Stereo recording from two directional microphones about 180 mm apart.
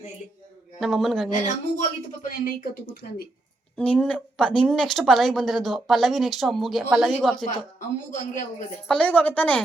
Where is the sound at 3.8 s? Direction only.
5° left (ahead or behind).